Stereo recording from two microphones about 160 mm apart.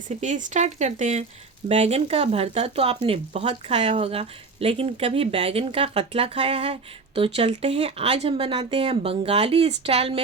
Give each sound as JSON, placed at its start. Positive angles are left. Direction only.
{"t": 0.2, "sound": "speech", "side_deg": -50}